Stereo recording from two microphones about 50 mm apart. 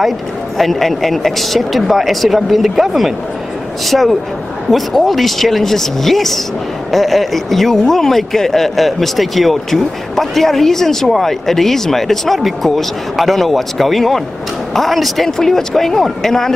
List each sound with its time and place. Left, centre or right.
0.6 s speech: centre